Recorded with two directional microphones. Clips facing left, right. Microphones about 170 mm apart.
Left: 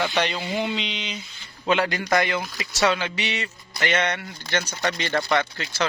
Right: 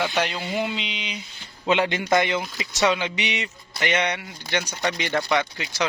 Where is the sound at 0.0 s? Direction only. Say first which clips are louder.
Even; 5° right (ahead or behind).